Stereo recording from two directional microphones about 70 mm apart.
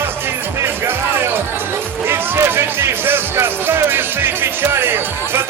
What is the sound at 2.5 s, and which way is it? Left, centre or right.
Music, right.